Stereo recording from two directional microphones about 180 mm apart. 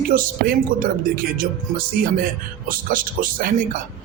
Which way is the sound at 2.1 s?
50° right (ahead or behind).